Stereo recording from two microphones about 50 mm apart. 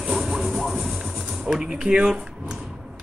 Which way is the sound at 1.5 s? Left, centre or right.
Centre.